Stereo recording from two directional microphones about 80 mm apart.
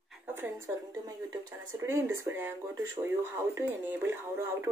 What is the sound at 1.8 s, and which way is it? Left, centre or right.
Speech, right.